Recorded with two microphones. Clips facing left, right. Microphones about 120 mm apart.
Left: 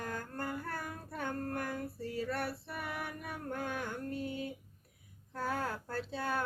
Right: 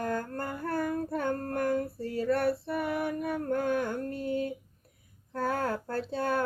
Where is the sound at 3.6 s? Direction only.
50° right (ahead or behind).